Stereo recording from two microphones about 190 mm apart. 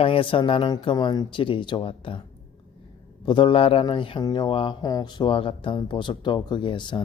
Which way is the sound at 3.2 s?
25° left (ahead or behind).